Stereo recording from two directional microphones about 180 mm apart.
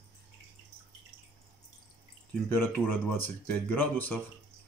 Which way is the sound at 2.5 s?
10° left (ahead or behind).